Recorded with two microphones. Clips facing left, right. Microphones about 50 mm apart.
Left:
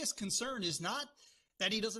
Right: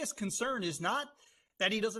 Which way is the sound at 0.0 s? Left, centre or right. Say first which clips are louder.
Right 5 dB; right.